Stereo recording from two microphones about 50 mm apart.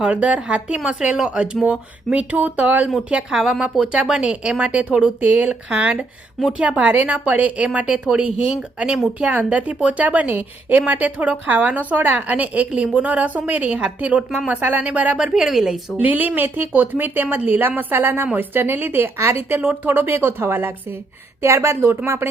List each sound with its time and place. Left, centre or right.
0.1 s speech: right
1.6 s speech: right
3.0 s speech: right
5.2 s a woman's voice: right
5.5 s speech: centre
6.9 s speech: right; by 9.0 s centre
9.1 s a woman's voice: right
15.2 s speech: centre
16.0 s a woman's voice: right
19.5 s a woman's voice: right
21.4 s speech: right